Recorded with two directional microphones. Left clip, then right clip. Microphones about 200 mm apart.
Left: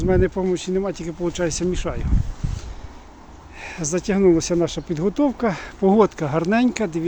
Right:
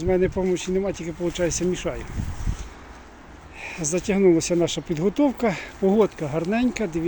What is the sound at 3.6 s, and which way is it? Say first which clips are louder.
Speech: left 1 dB; 10° left (ahead or behind).